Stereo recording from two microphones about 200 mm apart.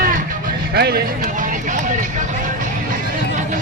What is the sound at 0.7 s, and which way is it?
Speech, 55° right (ahead or behind).